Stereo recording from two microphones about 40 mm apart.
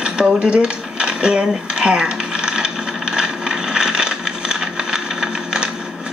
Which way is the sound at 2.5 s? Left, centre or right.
Centre.